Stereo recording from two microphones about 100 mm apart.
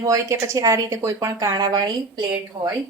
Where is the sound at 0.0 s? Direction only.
30° right (ahead or behind).